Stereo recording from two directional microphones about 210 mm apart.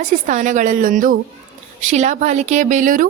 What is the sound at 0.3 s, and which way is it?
A woman's voice, 35° right (ahead or behind).